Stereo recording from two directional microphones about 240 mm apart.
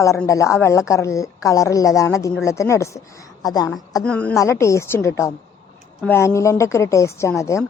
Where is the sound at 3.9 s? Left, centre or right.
Centre.